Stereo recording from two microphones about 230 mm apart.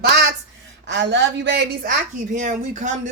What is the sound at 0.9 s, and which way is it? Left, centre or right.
Speech, right.